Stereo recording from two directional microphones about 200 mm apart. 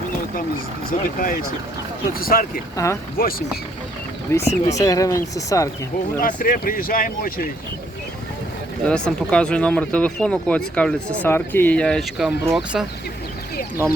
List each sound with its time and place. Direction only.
0.9 s speech: 45° left (ahead or behind)
2.7 s speech: 15° left (ahead or behind)
3.2 s speech: 45° left (ahead or behind)
4.3 s speech: 15° left (ahead or behind)
6.1 s speech: 45° left (ahead or behind)
8.9 s speech: 5° left (ahead or behind)